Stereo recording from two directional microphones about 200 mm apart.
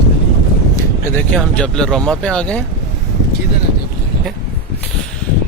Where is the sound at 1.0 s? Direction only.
10° left (ahead or behind).